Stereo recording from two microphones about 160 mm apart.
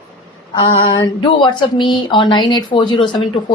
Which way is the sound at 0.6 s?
30° left (ahead or behind).